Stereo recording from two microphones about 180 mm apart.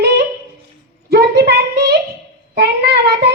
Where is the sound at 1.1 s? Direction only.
65° right (ahead or behind).